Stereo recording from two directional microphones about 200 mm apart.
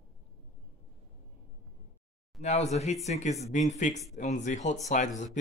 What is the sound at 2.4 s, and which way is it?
Speech, 35° left (ahead or behind).